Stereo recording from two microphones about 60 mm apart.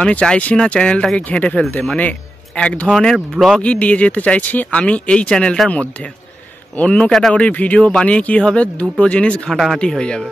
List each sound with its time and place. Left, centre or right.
0.0 s a man's voice: centre
2.9 s speech: centre
3.6 s speech: left
6.8 s speech: centre
7.3 s speech: left
9.5 s speech: centre
9.8 s speech: centre